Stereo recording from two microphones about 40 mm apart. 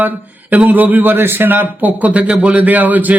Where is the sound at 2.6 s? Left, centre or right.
Right.